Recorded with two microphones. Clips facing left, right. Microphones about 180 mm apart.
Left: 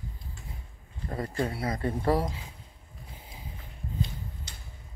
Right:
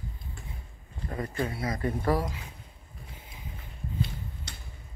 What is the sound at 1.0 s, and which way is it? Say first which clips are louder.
Speech: left 1 dB; 30° left (ahead or behind).